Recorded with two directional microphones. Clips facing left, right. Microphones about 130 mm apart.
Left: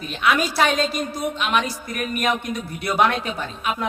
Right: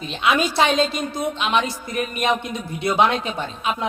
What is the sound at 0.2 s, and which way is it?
Speech, 25° right (ahead or behind).